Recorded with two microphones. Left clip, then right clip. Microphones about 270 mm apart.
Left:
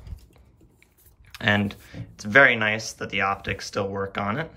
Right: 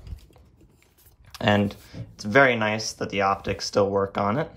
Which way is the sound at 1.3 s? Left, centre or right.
Centre.